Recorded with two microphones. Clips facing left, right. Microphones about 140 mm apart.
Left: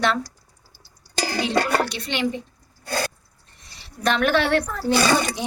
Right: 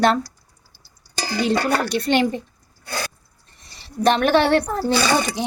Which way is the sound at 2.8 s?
45° left (ahead or behind).